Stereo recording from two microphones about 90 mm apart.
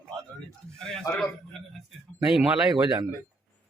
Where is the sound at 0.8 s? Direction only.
5° left (ahead or behind).